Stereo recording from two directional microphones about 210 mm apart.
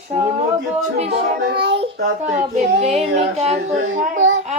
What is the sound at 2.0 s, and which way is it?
Child singing, 35° right (ahead or behind).